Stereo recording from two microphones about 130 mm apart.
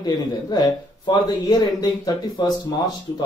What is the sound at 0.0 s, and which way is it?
Speech, 30° left (ahead or behind).